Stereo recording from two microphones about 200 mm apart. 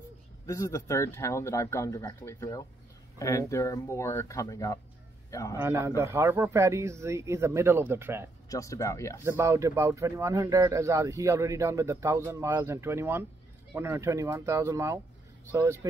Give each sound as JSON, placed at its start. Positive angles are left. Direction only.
{"t": 0.5, "sound": "speech", "side_deg": 15}
{"t": 5.6, "sound": "speech", "side_deg": -15}
{"t": 8.5, "sound": "speech", "side_deg": 15}
{"t": 9.2, "sound": "speech", "side_deg": -15}